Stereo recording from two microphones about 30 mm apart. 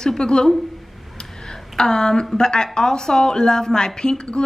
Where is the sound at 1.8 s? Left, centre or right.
Left.